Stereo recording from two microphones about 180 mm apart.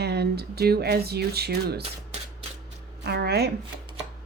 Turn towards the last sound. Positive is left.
turn(degrees=-60)  # may be behind; listen again after turning